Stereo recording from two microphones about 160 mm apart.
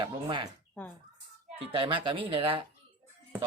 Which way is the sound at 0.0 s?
30° right (ahead or behind).